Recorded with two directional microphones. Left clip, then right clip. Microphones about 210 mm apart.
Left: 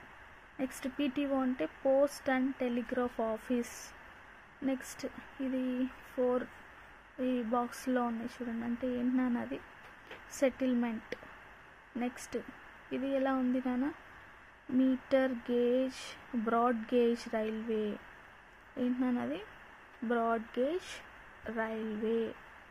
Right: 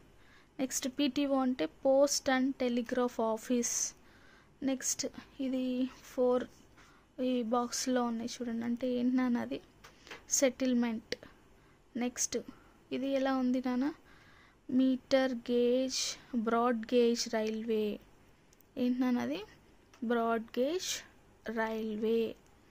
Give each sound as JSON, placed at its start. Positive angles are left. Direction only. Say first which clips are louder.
{"t": 0.6, "sound": "speech", "louder": "right 2 dB", "side_deg": -25}
{"t": 4.9, "sound": "speech", "louder": "right 2 dB", "side_deg": -25}
{"t": 12.9, "sound": "speech", "louder": "even", "side_deg": -20}